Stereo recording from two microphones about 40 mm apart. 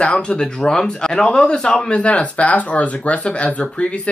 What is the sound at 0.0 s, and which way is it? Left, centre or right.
A man's voice, left.